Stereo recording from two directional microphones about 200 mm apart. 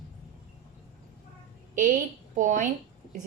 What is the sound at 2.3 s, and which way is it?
Speech, 40° right (ahead or behind).